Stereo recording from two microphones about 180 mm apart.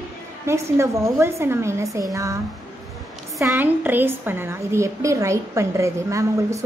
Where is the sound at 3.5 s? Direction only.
10° right (ahead or behind).